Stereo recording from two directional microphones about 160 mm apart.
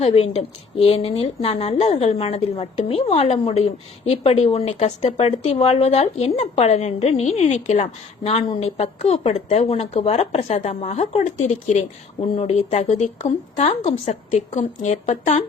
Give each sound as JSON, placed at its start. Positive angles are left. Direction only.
{"t": 0.0, "sound": "a woman's voice", "side_deg": 40}